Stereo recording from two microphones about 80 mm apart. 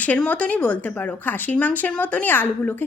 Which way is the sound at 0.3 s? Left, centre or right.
Centre.